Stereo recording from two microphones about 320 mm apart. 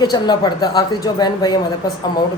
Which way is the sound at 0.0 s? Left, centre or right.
Centre.